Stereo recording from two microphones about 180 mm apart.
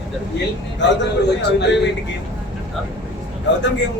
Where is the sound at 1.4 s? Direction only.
75° left (ahead or behind).